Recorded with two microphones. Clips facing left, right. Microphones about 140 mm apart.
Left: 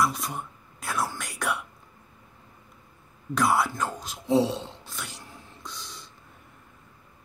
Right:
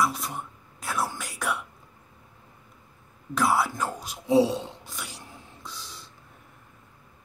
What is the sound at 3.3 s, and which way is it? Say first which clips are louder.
Speech: even; 5° right (ahead or behind).